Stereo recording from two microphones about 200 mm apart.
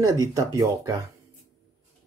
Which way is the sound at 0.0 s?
15° right (ahead or behind).